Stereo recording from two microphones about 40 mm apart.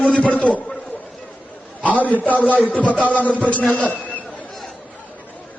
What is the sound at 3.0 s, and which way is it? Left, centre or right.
A man's voice, left.